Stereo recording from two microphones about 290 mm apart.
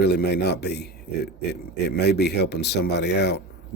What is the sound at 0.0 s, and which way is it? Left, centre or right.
Speech, left.